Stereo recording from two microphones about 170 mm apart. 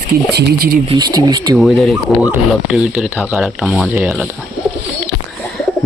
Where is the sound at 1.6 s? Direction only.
Centre (ahead or behind).